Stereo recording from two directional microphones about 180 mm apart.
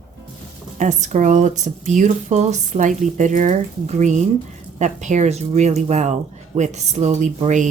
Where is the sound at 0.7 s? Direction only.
40° right (ahead or behind).